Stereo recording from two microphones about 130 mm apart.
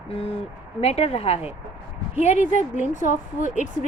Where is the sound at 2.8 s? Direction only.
75° left (ahead or behind).